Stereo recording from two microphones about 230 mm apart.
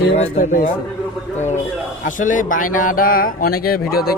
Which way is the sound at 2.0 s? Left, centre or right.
Left.